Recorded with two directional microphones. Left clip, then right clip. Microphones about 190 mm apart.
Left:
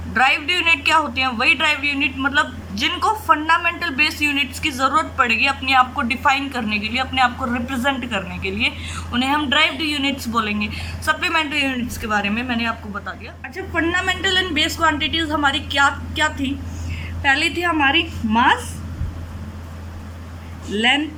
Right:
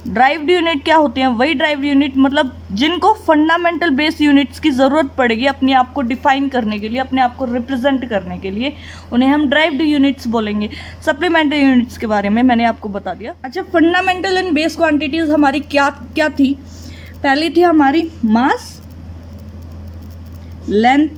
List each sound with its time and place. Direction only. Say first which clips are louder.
0.1 s a man's voice: right 5 dB; 40° right (ahead or behind)